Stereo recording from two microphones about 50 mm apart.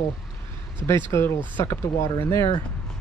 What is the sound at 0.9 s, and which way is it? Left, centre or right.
Speech, left.